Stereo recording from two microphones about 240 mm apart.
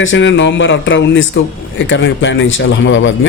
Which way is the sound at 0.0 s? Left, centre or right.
Left.